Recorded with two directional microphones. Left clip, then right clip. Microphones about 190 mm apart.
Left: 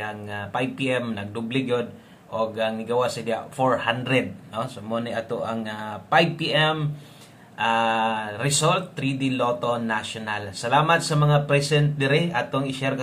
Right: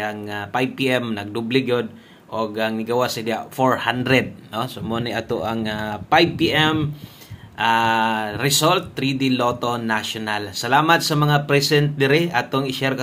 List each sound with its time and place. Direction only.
0.0 s speech: 35° right (ahead or behind)